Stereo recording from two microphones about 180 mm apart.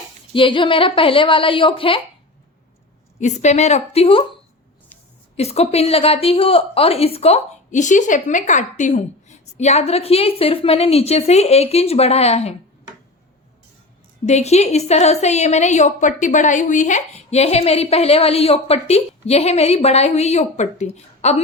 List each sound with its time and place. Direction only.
0.3 s a woman's voice: 30° left (ahead or behind)
3.2 s a woman's voice: 40° left (ahead or behind)
5.4 s a woman's voice: 35° left (ahead or behind)
14.3 s a woman's voice: 35° left (ahead or behind)